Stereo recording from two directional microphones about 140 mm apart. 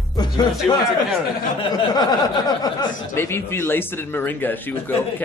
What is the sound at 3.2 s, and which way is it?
Speech, 15° left (ahead or behind).